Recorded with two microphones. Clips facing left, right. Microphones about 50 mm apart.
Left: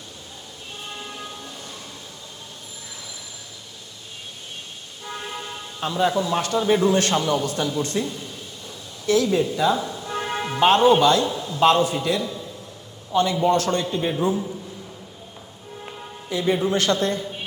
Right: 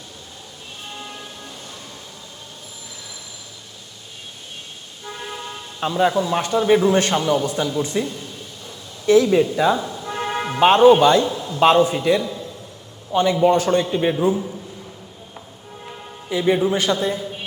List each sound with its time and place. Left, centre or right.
5.8 s a man's voice: centre
9.0 s speech: right
9.7 s music: centre
10.6 s a man's voice: right; by 14.5 s centre
16.3 s a man's voice: centre